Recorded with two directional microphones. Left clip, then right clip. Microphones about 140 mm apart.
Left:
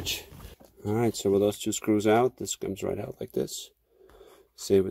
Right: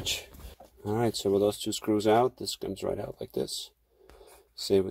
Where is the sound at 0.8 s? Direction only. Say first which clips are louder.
Left 1 dB; 30° left (ahead or behind).